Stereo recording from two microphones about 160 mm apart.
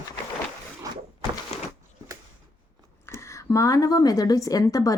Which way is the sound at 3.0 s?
15° left (ahead or behind).